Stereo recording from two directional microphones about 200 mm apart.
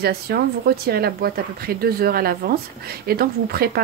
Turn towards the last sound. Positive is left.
turn(degrees=-50)  # may be behind; listen again after turning